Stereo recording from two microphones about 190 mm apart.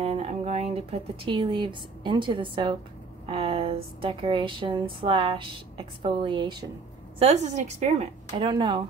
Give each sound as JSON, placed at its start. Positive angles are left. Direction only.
{"t": 0.0, "sound": "speech", "side_deg": -30}
{"t": 7.2, "sound": "a woman's voice", "side_deg": -35}
{"t": 8.3, "sound": "speech", "side_deg": -25}